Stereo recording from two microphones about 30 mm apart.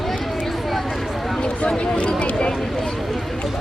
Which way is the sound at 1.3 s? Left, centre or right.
Left.